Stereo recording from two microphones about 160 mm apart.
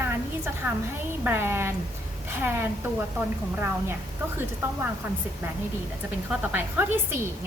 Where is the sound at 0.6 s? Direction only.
10° right (ahead or behind).